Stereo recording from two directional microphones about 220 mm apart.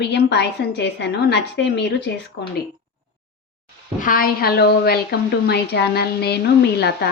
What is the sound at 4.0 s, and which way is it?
A woman's voice, 40° left (ahead or behind).